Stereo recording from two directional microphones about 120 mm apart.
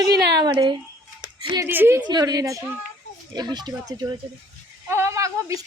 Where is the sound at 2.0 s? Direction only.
35° right (ahead or behind).